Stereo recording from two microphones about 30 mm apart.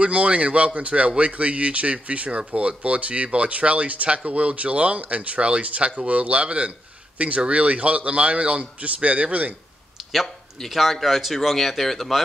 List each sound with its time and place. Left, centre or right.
0.0 s speech: right
10.7 s speech: centre